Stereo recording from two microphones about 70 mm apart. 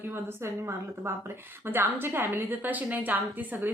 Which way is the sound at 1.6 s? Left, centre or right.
Right.